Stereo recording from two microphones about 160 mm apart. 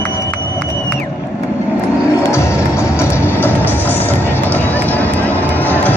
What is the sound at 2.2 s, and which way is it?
Music, 15° left (ahead or behind).